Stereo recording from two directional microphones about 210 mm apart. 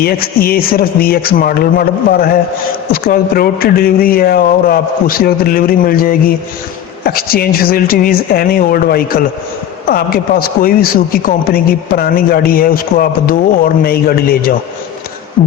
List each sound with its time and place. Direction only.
0.0 s a man's voice: 45° left (ahead or behind)